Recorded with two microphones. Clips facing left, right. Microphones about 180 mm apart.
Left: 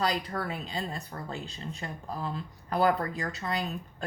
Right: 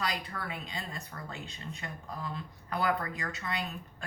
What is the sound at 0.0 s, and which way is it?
Speech, 35° left (ahead or behind).